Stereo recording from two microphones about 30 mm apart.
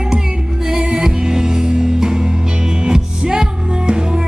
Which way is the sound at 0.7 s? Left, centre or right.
Right.